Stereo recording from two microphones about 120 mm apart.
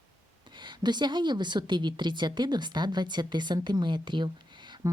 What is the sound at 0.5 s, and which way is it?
Speech, 40° right (ahead or behind).